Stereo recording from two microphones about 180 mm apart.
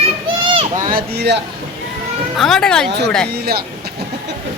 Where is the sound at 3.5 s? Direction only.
60° right (ahead or behind).